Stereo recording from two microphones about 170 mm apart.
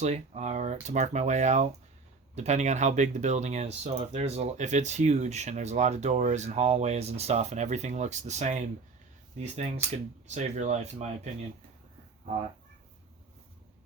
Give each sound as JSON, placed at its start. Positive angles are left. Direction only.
{"t": 0.0, "sound": "speech", "side_deg": -40}